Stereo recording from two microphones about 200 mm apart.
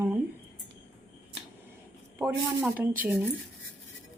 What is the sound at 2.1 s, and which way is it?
Speech, 10° right (ahead or behind).